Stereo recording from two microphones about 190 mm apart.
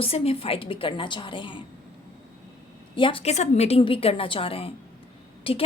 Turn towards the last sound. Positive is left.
turn(degrees=30)  # may be behind; listen again after turning